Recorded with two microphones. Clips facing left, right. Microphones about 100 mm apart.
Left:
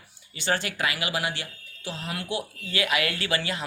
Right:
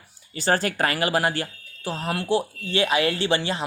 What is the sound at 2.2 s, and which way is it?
Speech, 30° right (ahead or behind).